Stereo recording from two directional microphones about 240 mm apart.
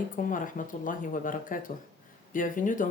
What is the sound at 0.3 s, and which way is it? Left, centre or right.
Speech, left.